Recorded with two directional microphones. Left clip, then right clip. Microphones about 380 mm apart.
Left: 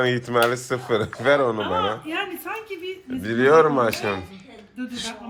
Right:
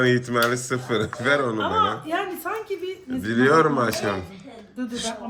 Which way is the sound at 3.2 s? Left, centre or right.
Centre.